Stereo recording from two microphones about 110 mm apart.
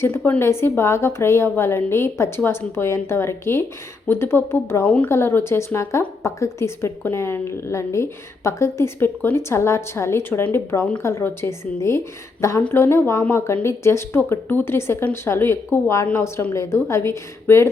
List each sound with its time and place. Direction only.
0.2 s speech: 20° left (ahead or behind)